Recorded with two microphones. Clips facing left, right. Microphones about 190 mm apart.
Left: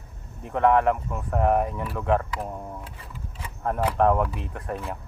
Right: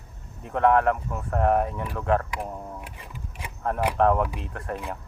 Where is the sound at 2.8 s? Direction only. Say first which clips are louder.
Even; 15° right (ahead or behind).